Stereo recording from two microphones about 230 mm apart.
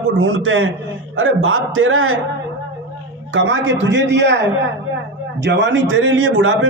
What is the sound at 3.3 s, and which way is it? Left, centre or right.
A man's voice, right.